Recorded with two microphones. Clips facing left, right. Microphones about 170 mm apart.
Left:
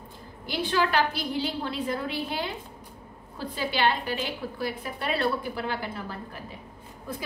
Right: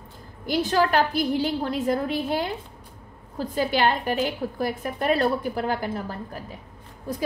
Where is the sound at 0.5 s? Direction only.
45° right (ahead or behind).